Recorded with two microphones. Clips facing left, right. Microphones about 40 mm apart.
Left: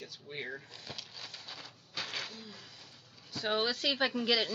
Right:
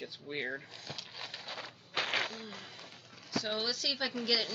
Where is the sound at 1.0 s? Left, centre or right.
Right.